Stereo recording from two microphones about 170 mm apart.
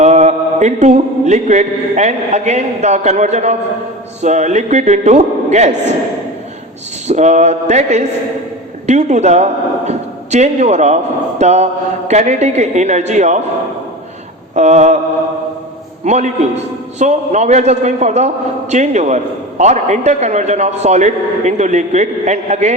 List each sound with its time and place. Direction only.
0.0 s a man's voice: 40° right (ahead or behind)
7.1 s a man's voice: 40° right (ahead or behind)
14.5 s a man's voice: 40° right (ahead or behind)
16.0 s a man's voice: 40° right (ahead or behind)